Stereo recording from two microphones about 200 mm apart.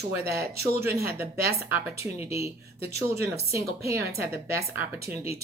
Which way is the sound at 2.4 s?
30° left (ahead or behind).